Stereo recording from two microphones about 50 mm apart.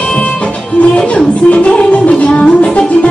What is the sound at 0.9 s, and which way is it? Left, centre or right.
Music, left.